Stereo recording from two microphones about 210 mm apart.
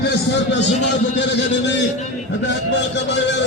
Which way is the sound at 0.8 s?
55° left (ahead or behind).